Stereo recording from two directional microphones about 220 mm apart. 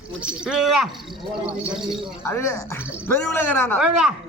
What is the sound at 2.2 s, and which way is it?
A man's voice, 10° left (ahead or behind).